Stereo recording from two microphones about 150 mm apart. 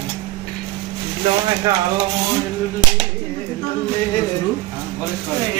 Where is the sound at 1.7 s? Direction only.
25° right (ahead or behind).